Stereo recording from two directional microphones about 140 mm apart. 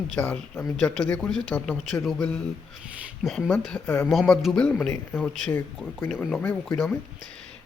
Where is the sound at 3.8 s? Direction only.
15° left (ahead or behind).